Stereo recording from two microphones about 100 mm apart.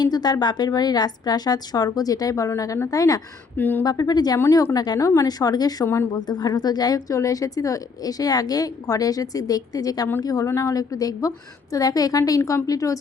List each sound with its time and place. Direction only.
0.0 s a woman's voice: 45° left (ahead or behind)
3.6 s a woman's voice: 20° left (ahead or behind)
3.8 s a woman's voice: 40° left (ahead or behind)
5.8 s a woman's voice: 25° left (ahead or behind)
6.1 s a woman's voice: 45° left (ahead or behind)